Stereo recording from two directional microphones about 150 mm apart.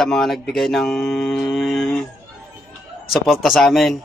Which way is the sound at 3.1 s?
Centre (ahead or behind).